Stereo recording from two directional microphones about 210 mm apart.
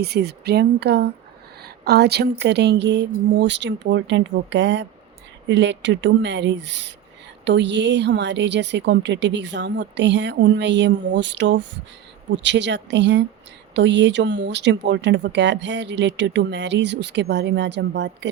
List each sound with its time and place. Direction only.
0.0 s speech: 50° right (ahead or behind)